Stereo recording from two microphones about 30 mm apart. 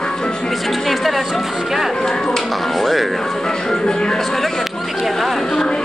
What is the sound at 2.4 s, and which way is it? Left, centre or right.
Speech, centre.